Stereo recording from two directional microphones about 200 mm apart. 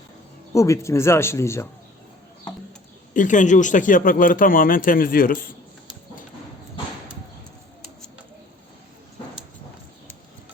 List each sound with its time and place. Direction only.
0.5 s speech: 15° left (ahead or behind)
3.2 s speech: 40° left (ahead or behind)